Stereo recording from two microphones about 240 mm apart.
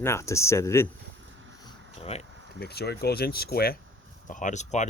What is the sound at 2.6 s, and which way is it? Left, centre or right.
Speech, left.